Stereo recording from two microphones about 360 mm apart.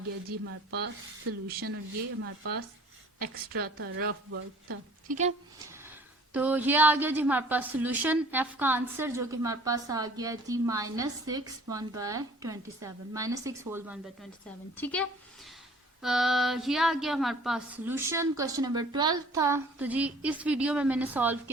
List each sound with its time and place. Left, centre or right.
0.3 s a woman's voice: right
5.0 s a woman's voice: centre
6.3 s a woman's voice: centre
16.0 s a woman's voice: centre